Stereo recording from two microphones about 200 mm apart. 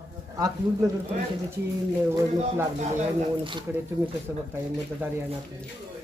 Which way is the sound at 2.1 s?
10° right (ahead or behind).